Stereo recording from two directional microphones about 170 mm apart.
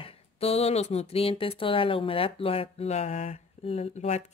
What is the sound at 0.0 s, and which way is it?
Speech, 35° left (ahead or behind).